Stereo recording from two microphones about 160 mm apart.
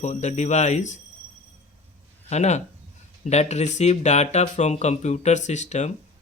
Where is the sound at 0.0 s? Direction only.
45° left (ahead or behind).